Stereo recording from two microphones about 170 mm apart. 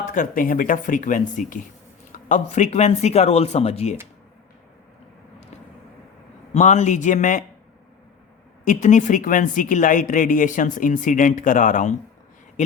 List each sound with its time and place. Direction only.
0.0 s speech: 50° left (ahead or behind)
6.5 s speech: 45° left (ahead or behind)
8.6 s speech: 45° left (ahead or behind)